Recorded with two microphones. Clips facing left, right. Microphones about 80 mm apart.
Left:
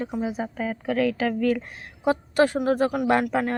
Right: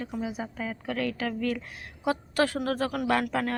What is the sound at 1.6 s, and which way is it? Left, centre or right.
A woman's voice, left.